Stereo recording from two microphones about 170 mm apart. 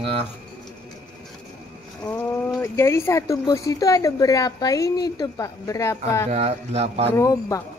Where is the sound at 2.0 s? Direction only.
20° left (ahead or behind).